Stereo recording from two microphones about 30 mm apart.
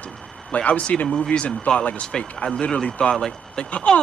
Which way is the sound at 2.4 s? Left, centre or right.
Left.